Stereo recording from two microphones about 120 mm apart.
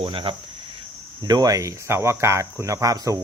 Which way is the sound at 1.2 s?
30° right (ahead or behind).